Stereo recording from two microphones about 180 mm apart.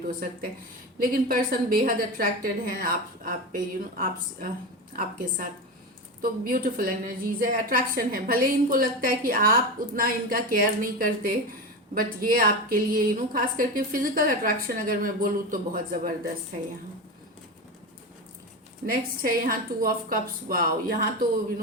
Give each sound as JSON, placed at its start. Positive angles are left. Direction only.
{"t": 0.9, "sound": "a woman's voice", "side_deg": -50}
{"t": 18.9, "sound": "a woman's voice", "side_deg": -55}